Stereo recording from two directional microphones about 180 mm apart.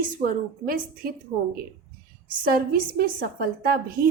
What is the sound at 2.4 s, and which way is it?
A woman's voice, 55° right (ahead or behind).